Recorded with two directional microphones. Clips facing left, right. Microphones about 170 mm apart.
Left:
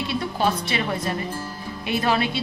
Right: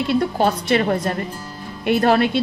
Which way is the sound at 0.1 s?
50° right (ahead or behind).